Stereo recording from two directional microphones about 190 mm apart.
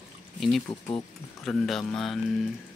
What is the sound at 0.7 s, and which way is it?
Speech, 25° left (ahead or behind).